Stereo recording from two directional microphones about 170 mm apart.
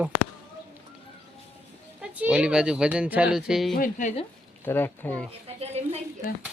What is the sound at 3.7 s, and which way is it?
Speech, 50° left (ahead or behind).